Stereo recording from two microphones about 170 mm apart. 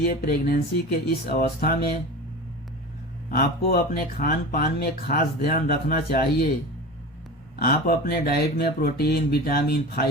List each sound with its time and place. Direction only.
0.0 s speech: 60° left (ahead or behind)
3.2 s speech: 60° left (ahead or behind)
7.6 s speech: 60° left (ahead or behind)